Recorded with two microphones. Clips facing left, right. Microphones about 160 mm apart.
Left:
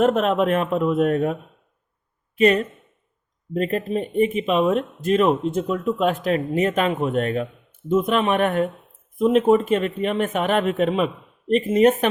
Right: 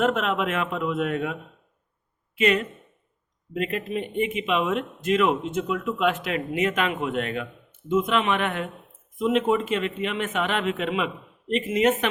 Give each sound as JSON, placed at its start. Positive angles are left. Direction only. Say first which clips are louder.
{"t": 0.0, "sound": "speech", "louder": "left 5 dB", "side_deg": 40}
{"t": 2.4, "sound": "speech", "louder": "left 5 dB", "side_deg": 40}